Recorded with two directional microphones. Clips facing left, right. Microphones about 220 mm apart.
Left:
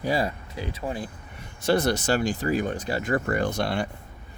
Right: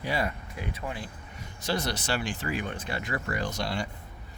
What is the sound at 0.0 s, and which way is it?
Speech, 35° left (ahead or behind).